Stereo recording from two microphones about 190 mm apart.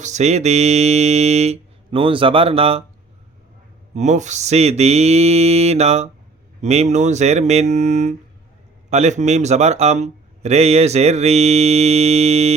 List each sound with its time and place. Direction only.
0.0 s speech: 35° right (ahead or behind)
3.9 s speech: 40° right (ahead or behind)